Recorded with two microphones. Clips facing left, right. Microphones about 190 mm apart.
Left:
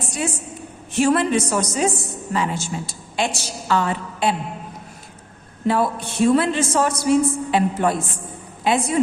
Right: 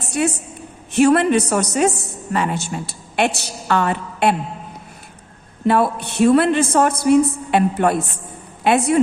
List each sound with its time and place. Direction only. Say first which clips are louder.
0.2 s a woman's voice: right 7 dB; 60° right (ahead or behind)
5.6 s a woman's voice: right 3 dB; 60° right (ahead or behind)